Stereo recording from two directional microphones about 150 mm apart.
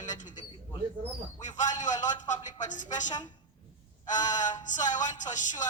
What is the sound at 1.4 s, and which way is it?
A man's voice, 55° left (ahead or behind).